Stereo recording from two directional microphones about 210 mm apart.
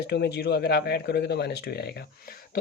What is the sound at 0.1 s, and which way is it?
Speech, 50° left (ahead or behind).